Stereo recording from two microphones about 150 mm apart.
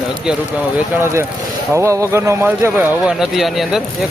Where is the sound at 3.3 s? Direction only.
Centre (ahead or behind).